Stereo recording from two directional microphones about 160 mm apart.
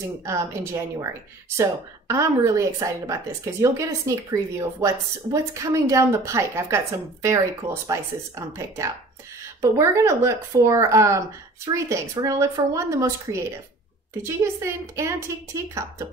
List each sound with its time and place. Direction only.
0.2 s a woman's voice: 20° right (ahead or behind)
1.6 s a woman's voice: 20° right (ahead or behind)